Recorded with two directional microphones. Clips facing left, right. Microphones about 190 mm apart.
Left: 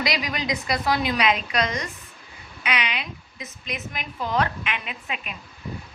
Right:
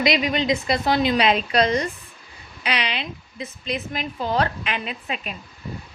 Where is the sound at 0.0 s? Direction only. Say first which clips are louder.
Right 6 dB; 25° right (ahead or behind).